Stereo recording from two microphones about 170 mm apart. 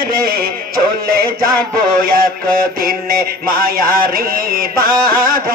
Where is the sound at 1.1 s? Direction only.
60° right (ahead or behind).